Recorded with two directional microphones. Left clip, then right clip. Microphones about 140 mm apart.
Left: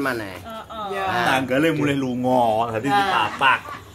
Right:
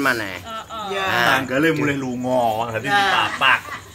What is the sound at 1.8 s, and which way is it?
Speech, 70° left (ahead or behind).